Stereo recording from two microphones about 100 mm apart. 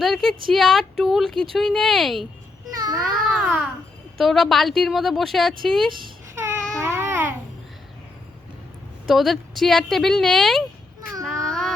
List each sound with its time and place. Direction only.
0.0 s a woman's voice: centre (ahead or behind)
2.7 s a sound: 40° right (ahead or behind)
3.0 s a woman's voice: 5° right (ahead or behind)
6.7 s babbling: 25° right (ahead or behind)
9.0 s a woman's voice: centre (ahead or behind)
11.2 s a sound: 5° left (ahead or behind)